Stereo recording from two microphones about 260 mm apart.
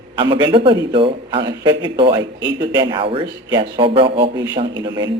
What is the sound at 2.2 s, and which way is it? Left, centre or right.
Speech, right.